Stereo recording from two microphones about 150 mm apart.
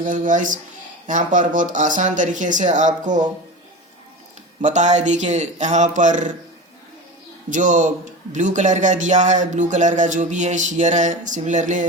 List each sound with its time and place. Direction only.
0.0 s a man's voice: 60° right (ahead or behind)
4.6 s speech: 50° right (ahead or behind)
7.5 s a man's voice: 60° right (ahead or behind)